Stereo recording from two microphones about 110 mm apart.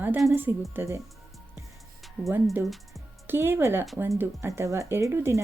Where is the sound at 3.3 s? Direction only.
20° right (ahead or behind).